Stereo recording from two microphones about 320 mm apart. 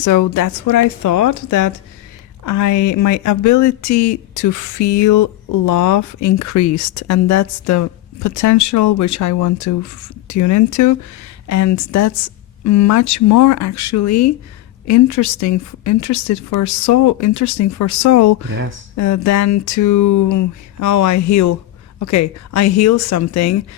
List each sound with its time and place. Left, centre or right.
0.0 s speech: left